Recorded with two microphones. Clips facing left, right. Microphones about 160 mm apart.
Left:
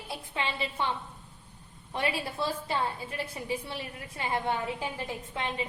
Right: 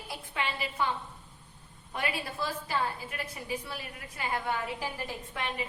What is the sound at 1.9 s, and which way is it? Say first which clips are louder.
A woman's voice: left 3 dB; 30° left (ahead or behind).